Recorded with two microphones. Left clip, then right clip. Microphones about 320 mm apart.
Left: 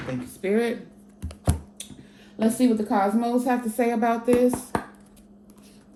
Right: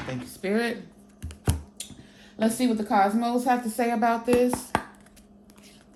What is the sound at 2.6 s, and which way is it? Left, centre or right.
Speech, centre.